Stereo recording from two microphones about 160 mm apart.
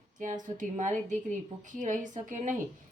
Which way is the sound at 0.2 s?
50° right (ahead or behind).